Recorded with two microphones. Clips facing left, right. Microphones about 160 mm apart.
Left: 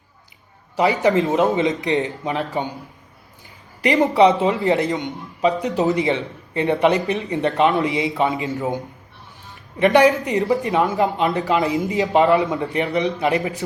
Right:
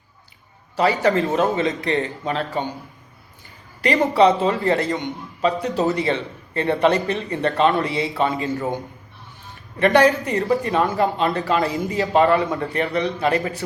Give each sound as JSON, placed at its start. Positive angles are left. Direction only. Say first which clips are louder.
{"t": 0.8, "sound": "a man's voice", "louder": "left 1 dB", "side_deg": 20}
{"t": 3.8, "sound": "a man's voice", "louder": "left 1 dB", "side_deg": 20}
{"t": 9.7, "sound": "a man's voice", "louder": "left 1 dB", "side_deg": 15}